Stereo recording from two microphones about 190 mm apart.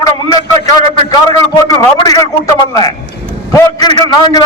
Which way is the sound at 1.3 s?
20° left (ahead or behind).